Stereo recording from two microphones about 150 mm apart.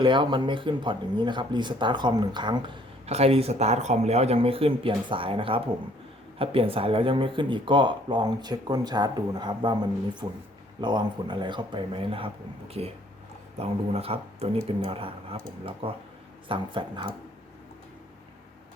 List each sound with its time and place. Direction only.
0.0 s speech: 35° right (ahead or behind)
3.1 s speech: 40° right (ahead or behind)